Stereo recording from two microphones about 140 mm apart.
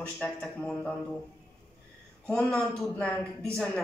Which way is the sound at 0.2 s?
5° left (ahead or behind).